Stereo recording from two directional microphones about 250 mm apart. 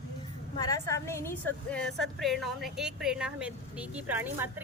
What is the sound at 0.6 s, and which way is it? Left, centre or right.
A woman's voice, centre.